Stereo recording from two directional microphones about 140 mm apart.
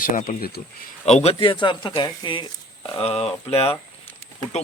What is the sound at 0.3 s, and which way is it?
Speech, 90° left.